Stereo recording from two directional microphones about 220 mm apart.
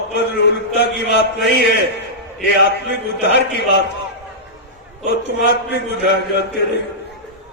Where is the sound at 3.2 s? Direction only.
50° left (ahead or behind).